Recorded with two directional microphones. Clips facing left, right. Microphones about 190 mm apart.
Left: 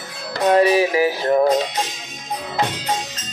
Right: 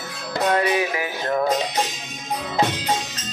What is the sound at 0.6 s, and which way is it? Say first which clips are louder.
Music: left 6 dB; 30° left (ahead or behind).